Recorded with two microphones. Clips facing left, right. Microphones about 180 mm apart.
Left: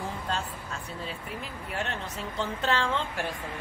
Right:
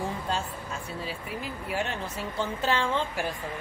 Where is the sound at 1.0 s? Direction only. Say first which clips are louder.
Right 2 dB; 5° right (ahead or behind).